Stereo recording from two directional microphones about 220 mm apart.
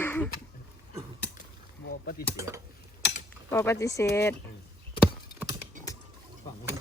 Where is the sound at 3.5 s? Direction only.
15° left (ahead or behind).